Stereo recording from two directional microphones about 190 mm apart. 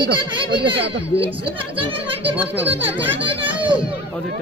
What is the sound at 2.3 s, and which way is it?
Speech, 10° right (ahead or behind).